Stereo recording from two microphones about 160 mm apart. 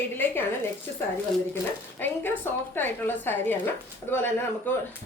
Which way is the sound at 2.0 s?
10° left (ahead or behind).